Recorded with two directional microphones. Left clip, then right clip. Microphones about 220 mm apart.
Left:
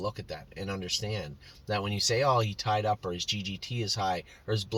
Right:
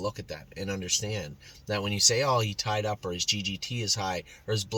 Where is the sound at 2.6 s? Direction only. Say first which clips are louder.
Left 2 dB; 15° right (ahead or behind).